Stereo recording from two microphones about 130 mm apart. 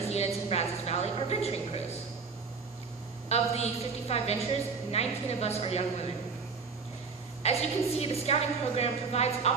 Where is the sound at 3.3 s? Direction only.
55° left (ahead or behind).